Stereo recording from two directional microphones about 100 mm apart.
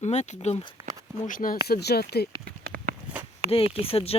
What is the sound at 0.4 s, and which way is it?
Speech, 55° left (ahead or behind).